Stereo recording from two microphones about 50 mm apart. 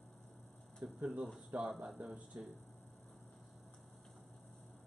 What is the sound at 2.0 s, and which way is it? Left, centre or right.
Speech, right.